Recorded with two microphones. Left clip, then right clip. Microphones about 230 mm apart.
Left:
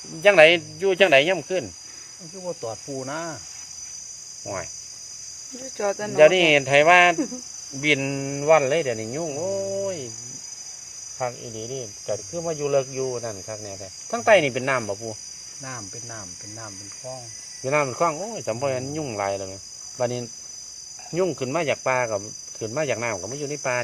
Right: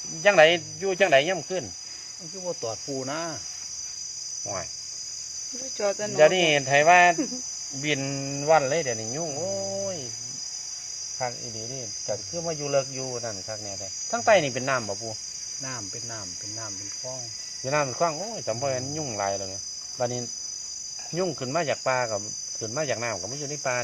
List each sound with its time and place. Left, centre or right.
0.2 s speech: left
2.5 s cricket: centre
5.7 s cricket: centre
6.1 s speech: left
12.0 s cricket: left
14.3 s speech: left
17.7 s speech: left